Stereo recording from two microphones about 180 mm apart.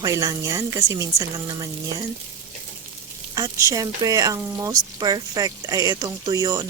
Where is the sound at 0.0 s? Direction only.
20° right (ahead or behind).